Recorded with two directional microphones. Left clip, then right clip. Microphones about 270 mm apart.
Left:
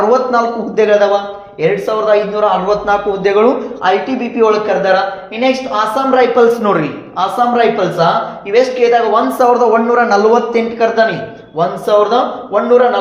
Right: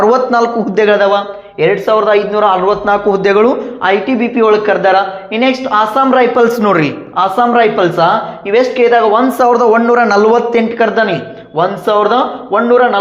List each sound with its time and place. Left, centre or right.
0.0 s speech: right